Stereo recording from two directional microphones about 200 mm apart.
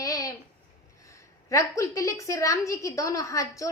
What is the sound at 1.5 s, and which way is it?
Child singing, 15° left (ahead or behind).